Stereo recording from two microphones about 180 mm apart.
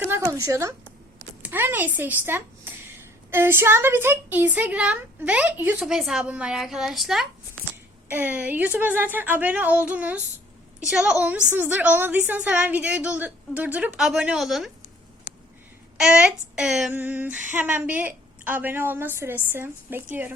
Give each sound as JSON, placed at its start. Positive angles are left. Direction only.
{"t": 0.0, "sound": "a woman's voice", "side_deg": -15}
{"t": 16.0, "sound": "a woman's voice", "side_deg": -5}